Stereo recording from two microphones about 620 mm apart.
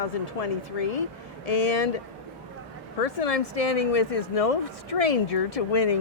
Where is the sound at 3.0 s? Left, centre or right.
Left.